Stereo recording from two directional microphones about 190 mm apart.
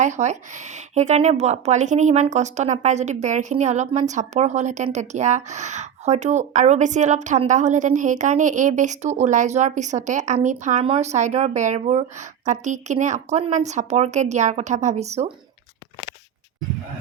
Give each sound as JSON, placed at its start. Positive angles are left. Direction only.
{"t": 0.0, "sound": "speech", "side_deg": -40}